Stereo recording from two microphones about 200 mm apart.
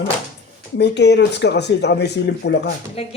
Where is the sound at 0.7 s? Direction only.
55° left (ahead or behind).